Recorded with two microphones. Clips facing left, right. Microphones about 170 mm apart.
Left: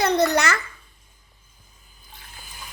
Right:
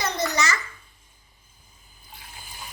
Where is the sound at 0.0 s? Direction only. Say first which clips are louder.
Left 7 dB; 60° left (ahead or behind).